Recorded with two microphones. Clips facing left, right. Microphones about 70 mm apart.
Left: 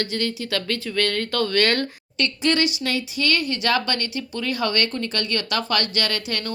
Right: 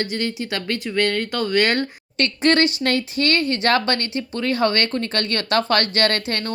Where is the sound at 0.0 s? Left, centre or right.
Right.